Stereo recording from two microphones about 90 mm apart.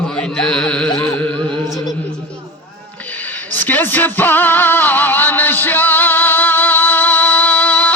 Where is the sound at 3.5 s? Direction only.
20° left (ahead or behind).